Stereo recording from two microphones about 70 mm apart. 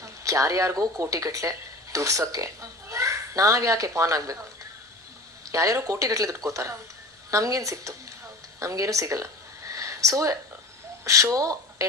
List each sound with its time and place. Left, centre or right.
0.0 s a child's voice: right
5.5 s speech: right
8.5 s a sound: right
11.0 s speech: right